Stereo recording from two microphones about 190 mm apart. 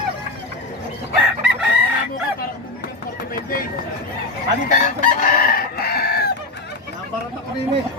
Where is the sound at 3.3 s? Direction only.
50° left (ahead or behind).